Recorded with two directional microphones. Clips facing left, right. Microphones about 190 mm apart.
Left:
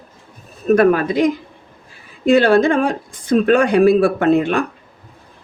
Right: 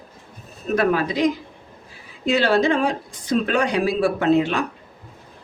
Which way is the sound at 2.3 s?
50° left (ahead or behind).